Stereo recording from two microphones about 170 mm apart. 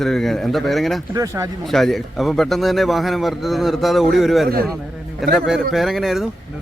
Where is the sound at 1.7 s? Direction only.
Centre (ahead or behind).